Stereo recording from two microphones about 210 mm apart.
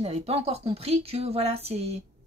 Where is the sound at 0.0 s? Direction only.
30° right (ahead or behind).